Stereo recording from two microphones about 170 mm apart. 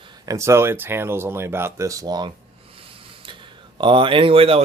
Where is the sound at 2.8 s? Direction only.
30° right (ahead or behind).